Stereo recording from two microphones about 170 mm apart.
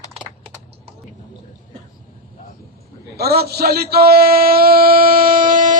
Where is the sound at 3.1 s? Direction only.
70° right (ahead or behind); by 5.7 s 50° right (ahead or behind).